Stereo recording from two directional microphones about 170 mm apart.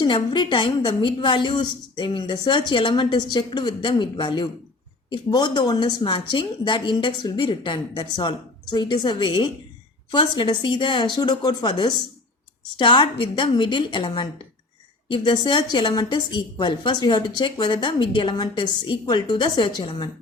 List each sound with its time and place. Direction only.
0.0 s a woman's voice: 25° left (ahead or behind)